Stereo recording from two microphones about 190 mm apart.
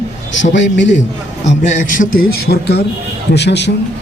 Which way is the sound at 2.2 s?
55° left (ahead or behind).